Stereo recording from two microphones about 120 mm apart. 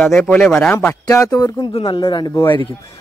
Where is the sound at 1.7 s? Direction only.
45° left (ahead or behind).